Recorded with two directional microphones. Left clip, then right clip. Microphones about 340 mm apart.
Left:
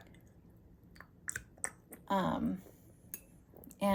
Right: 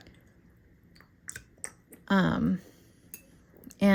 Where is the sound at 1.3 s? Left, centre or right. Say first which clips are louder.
Left 1 dB; centre.